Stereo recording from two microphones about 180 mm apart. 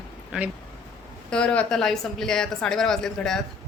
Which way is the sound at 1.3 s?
5° left (ahead or behind).